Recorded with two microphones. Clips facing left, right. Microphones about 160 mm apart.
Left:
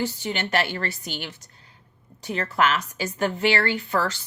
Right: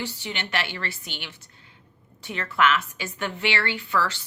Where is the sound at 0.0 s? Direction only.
45° left (ahead or behind).